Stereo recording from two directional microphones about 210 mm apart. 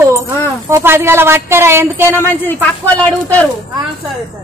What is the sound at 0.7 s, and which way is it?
A woman's voice, 15° right (ahead or behind).